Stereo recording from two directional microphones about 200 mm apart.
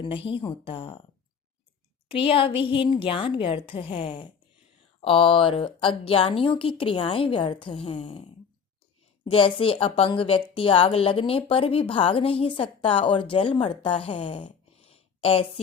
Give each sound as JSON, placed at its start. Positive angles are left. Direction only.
{"t": 0.0, "sound": "a woman's voice", "side_deg": 25}
{"t": 2.0, "sound": "a woman's voice", "side_deg": 25}